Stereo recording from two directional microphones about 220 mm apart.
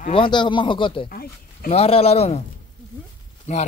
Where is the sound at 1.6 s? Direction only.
25° left (ahead or behind).